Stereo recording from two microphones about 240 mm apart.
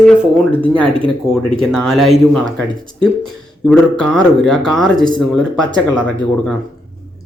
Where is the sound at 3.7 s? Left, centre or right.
Centre.